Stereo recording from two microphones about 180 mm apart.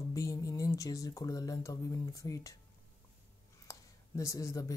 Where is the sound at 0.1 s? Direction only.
15° left (ahead or behind).